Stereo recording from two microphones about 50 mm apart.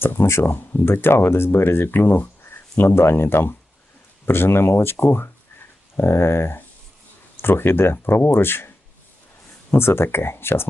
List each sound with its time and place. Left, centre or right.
0.0 s speech: left
0.4 s speech: left
0.9 s speech: left
9.7 s speech: left